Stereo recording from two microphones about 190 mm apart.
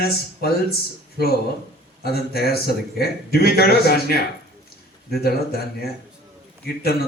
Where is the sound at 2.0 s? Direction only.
55° left (ahead or behind).